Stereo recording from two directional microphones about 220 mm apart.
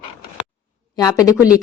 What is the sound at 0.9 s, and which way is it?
Speech, 15° left (ahead or behind).